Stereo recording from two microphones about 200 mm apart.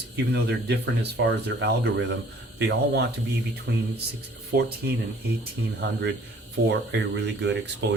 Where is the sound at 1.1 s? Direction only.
55° right (ahead or behind).